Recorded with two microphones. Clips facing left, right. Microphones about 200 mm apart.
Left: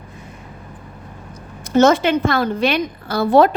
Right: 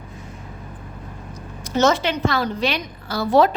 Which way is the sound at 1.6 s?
55° left (ahead or behind).